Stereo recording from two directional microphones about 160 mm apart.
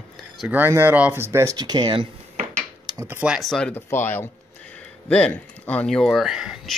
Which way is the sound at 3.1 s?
10° right (ahead or behind).